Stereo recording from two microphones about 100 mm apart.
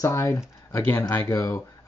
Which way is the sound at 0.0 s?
30° left (ahead or behind).